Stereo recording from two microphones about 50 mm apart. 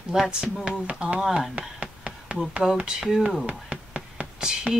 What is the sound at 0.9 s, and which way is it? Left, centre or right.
Speech, right.